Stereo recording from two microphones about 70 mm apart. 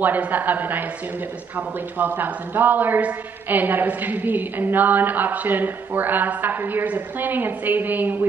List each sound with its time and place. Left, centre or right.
0.0 s a woman's voice: right
2.0 s a woman's voice: right